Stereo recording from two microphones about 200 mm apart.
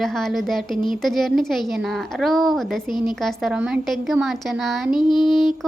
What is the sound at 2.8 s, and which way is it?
Speech, 20° left (ahead or behind).